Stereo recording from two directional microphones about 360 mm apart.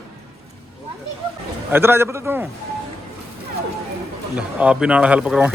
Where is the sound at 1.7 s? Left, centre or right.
Centre.